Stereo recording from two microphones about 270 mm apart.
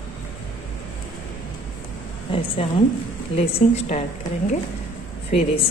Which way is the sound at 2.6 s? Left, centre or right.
Left.